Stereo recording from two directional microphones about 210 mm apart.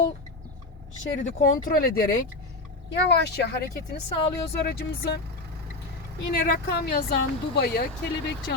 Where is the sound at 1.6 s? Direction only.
45° left (ahead or behind).